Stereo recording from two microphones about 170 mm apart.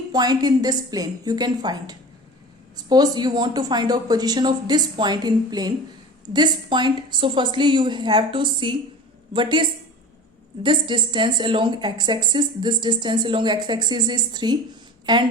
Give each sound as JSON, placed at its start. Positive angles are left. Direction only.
{"t": 0.1, "sound": "a woman's voice", "side_deg": -25}